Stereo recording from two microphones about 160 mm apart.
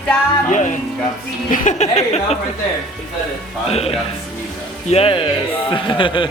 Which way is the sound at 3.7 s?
40° left (ahead or behind).